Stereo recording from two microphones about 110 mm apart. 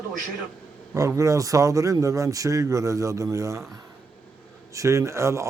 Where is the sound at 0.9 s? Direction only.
30° right (ahead or behind).